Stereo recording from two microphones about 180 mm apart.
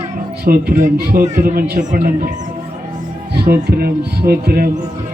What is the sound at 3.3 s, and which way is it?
Speech, 60° right (ahead or behind).